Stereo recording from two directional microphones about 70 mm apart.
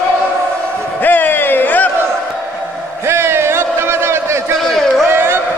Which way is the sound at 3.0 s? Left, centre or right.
Right.